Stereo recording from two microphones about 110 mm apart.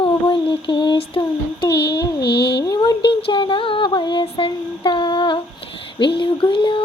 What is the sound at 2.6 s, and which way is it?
Mantra, 40° left (ahead or behind).